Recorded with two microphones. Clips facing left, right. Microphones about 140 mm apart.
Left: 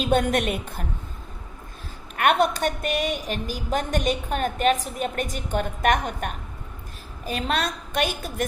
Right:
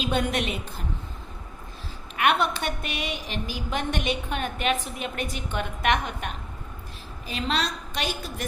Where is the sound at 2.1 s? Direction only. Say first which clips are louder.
Left 3 dB; 45° left (ahead or behind).